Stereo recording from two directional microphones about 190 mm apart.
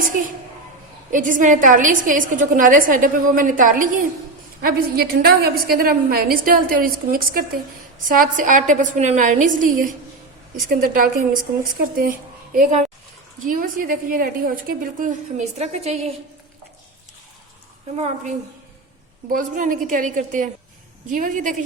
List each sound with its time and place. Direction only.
1.1 s a woman's voice: 45° right (ahead or behind)
13.4 s a woman's voice: 45° right (ahead or behind)
19.3 s a woman's voice: 45° right (ahead or behind)